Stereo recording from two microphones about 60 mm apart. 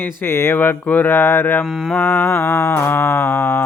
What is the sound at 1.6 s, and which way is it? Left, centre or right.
Mantra, centre.